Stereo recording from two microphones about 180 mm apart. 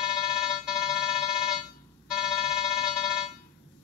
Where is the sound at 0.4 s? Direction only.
5° right (ahead or behind).